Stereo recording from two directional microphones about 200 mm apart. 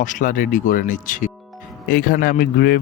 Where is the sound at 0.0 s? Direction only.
40° left (ahead or behind).